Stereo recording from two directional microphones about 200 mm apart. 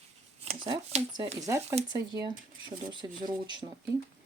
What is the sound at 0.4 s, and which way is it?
Speech, 30° right (ahead or behind).